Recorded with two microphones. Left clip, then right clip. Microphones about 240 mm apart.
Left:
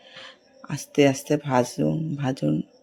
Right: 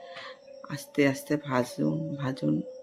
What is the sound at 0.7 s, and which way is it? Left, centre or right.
Speech, centre.